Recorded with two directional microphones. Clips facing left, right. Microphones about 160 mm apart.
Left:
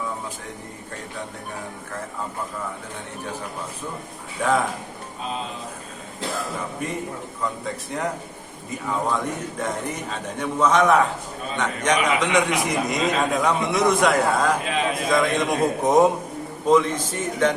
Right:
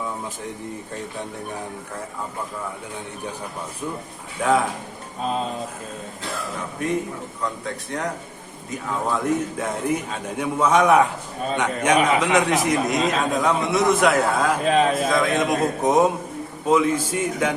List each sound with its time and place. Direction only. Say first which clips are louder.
6.8 s a man's voice: right 4 dB; centre (ahead or behind)
14.6 s a man's voice: right 6 dB; 40° right (ahead or behind)
15.0 s a man's voice: right 1 dB; centre (ahead or behind)